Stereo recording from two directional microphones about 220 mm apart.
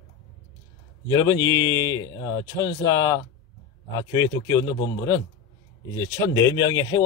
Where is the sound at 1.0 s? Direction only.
15° left (ahead or behind).